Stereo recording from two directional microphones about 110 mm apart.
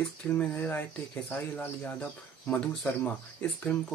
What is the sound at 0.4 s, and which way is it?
Speech, 15° left (ahead or behind).